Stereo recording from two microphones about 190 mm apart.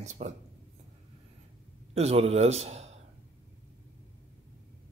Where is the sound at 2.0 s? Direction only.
35° right (ahead or behind).